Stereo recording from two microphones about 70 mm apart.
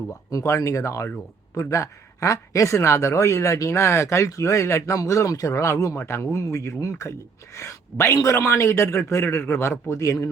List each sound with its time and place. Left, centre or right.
0.3 s a man's voice: left
10.0 s a man's voice: left